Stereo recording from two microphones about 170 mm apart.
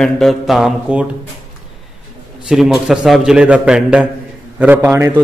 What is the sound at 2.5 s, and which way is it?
A man's voice, 5° right (ahead or behind).